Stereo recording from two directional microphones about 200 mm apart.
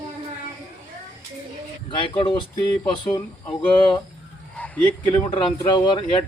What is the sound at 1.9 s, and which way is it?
Speech, 25° left (ahead or behind).